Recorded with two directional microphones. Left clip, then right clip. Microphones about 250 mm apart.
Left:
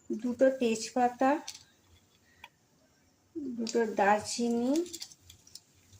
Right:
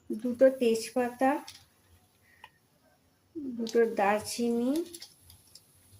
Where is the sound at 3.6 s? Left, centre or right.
Centre.